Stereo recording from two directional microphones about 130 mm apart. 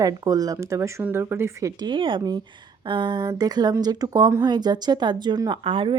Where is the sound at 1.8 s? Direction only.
35° right (ahead or behind).